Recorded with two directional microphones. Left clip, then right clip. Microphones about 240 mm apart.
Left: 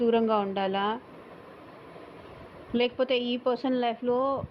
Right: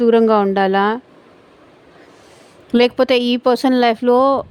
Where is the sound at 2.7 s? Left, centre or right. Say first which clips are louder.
Right 13 dB; right.